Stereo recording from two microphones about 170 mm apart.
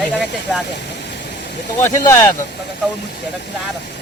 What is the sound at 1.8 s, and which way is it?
Speech, 15° left (ahead or behind).